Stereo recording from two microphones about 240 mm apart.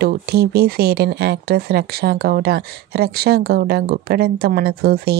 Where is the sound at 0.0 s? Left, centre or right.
Right.